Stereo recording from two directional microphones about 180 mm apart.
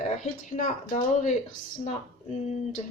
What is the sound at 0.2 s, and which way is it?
Speech, 45° left (ahead or behind).